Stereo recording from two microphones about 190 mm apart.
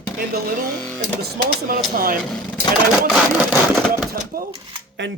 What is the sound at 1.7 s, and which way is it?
Speech, 50° right (ahead or behind).